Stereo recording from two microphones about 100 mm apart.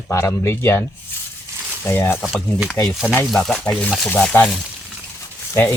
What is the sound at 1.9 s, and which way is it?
Speech, 20° left (ahead or behind).